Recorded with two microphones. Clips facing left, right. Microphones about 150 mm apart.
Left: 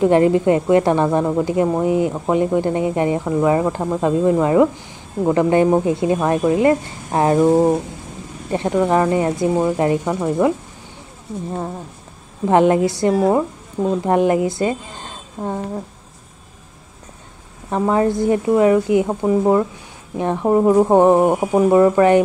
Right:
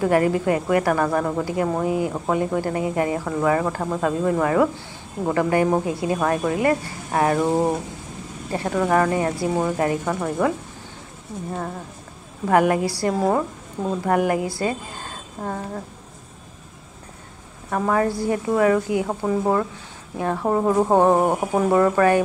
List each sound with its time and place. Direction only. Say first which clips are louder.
0.0 s speech: left 5 dB; 25° left (ahead or behind)
12.4 s speech: left 4 dB; 25° left (ahead or behind)
17.6 s speech: left 4 dB; 20° left (ahead or behind)